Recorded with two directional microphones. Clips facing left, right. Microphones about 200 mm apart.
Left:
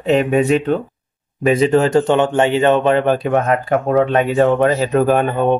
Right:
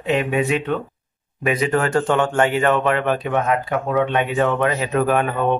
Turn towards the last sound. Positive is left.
turn(degrees=35)  # may be behind; listen again after turning